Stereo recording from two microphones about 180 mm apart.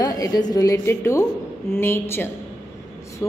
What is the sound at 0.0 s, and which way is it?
A woman's voice, 20° left (ahead or behind).